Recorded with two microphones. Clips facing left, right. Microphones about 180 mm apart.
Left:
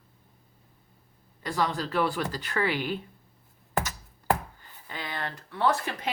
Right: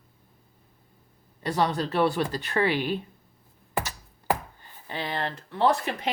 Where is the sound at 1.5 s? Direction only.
30° right (ahead or behind).